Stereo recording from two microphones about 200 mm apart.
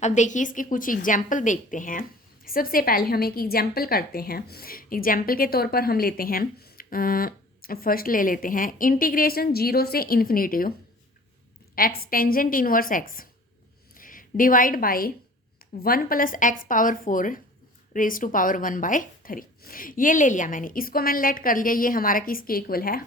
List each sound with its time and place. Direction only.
0.0 s a woman's voice: 35° left (ahead or behind)
11.7 s a woman's voice: 50° left (ahead or behind)